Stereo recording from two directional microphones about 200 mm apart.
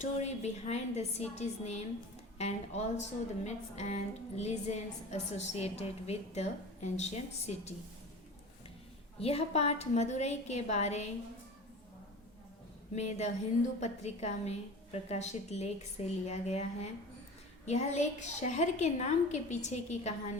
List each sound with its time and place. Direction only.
0.0 s a woman's voice: 35° left (ahead or behind)
9.2 s a woman's voice: 30° left (ahead or behind)
13.0 s a woman's voice: 35° left (ahead or behind)